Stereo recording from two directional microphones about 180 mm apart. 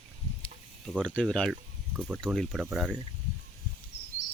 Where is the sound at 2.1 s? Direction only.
5° left (ahead or behind).